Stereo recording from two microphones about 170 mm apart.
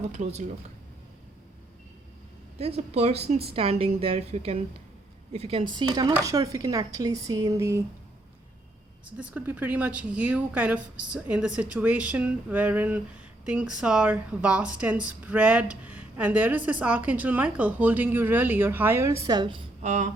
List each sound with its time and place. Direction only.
0.1 s speech: 40° right (ahead or behind)
2.6 s a woman's voice: 35° right (ahead or behind); by 7.8 s 20° right (ahead or behind)
9.0 s speech: 10° right (ahead or behind); by 19.6 s 25° right (ahead or behind)
19.8 s a sound: 45° right (ahead or behind)